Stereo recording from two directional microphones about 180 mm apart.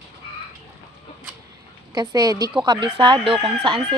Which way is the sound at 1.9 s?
20° right (ahead or behind).